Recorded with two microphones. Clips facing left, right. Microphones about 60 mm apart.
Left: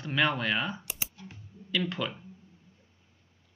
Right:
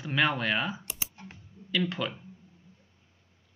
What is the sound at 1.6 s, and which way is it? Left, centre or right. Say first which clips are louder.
Speech: right 1 dB; centre.